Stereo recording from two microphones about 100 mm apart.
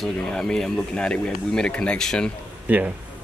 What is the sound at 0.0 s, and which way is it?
Speech, 5° left (ahead or behind).